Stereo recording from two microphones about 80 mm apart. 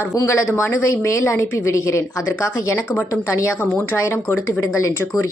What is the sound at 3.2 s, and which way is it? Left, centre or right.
Speech, left.